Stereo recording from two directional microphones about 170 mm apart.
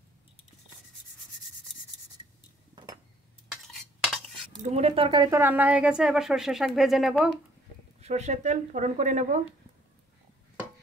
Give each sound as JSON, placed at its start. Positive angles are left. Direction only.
{"t": 3.6, "sound": "stir", "side_deg": 0}
{"t": 4.6, "sound": "speech", "side_deg": -40}
{"t": 5.4, "sound": "speech", "side_deg": -10}
{"t": 8.0, "sound": "speech", "side_deg": -40}